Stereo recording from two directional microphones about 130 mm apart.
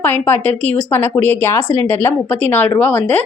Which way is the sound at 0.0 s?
15° left (ahead or behind).